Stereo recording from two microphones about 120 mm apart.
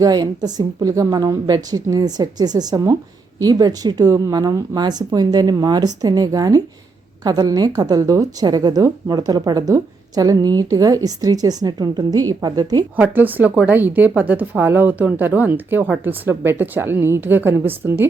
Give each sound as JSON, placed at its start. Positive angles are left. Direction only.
{"t": 0.0, "sound": "speech", "side_deg": -35}
{"t": 13.0, "sound": "a woman's voice", "side_deg": -15}